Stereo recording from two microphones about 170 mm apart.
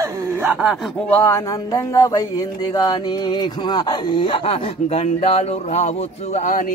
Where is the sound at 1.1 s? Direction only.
15° left (ahead or behind).